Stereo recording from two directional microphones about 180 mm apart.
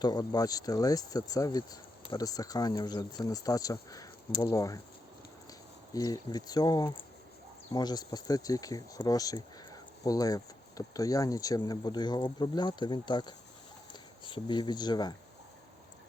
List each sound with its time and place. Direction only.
0.0 s speech: 20° left (ahead or behind)
5.9 s speech: 20° left (ahead or behind)